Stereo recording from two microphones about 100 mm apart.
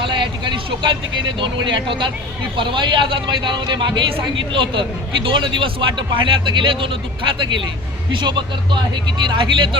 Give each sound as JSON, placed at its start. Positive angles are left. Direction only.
{"t": 0.0, "sound": "vehicle", "side_deg": -55}
{"t": 1.4, "sound": "a man's voice", "side_deg": -55}